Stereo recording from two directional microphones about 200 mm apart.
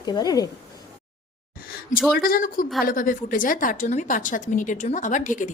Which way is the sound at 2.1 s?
45° left (ahead or behind).